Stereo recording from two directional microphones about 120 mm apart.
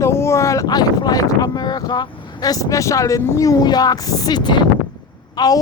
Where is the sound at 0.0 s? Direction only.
20° left (ahead or behind).